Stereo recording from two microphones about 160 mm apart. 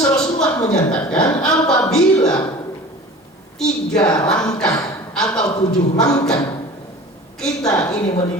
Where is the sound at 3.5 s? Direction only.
5° left (ahead or behind).